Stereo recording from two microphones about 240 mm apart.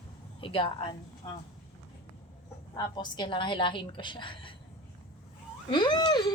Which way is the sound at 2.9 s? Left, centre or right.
Centre.